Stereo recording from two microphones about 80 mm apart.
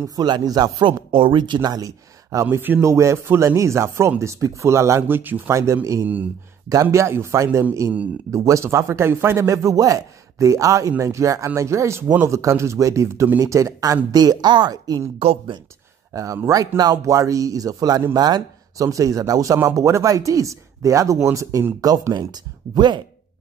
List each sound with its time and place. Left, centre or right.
0.1 s speech: right
2.5 s speech: right
2.8 s a man's voice: right
5.0 s speech: right
5.5 s a man's voice: right
14.1 s speech: right
16.1 s speech: right
22.2 s speech: right